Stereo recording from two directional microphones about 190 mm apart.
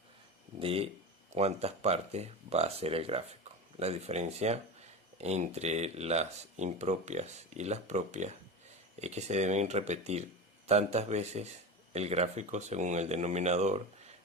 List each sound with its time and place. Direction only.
0.6 s speech: 30° right (ahead or behind)